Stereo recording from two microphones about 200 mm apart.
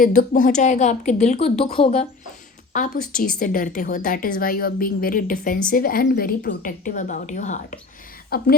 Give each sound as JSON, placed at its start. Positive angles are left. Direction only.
{"t": 0.0, "sound": "a woman's voice", "side_deg": 40}
{"t": 2.7, "sound": "a woman's voice", "side_deg": 40}
{"t": 3.0, "sound": "a woman's voice", "side_deg": 5}
{"t": 3.3, "sound": "a woman's voice", "side_deg": 45}
{"t": 8.3, "sound": "a woman's voice", "side_deg": 50}